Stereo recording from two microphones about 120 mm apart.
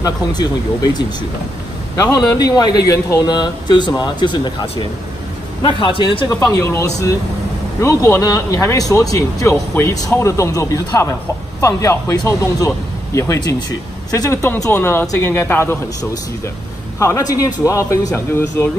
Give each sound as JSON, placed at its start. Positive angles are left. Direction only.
{"t": 0.0, "sound": "speech", "side_deg": 35}
{"t": 2.0, "sound": "speech", "side_deg": 30}
{"t": 6.5, "sound": "speech", "side_deg": 25}